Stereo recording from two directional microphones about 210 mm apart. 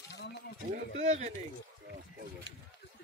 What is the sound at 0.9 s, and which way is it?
Speech, 35° right (ahead or behind).